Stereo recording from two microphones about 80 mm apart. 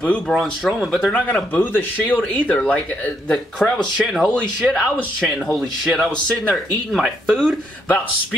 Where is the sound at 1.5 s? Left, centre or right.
Left; by 7.5 s centre.